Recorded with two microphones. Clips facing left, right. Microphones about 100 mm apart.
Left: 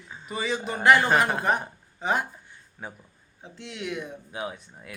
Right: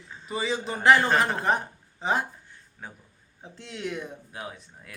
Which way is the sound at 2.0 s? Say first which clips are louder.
Even; 30° right (ahead or behind).